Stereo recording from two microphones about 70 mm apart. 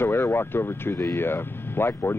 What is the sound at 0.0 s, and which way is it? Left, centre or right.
Speech, left.